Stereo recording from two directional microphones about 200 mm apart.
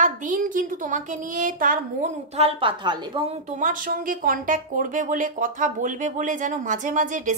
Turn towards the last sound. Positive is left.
turn(degrees=-40)  # may be behind; listen again after turning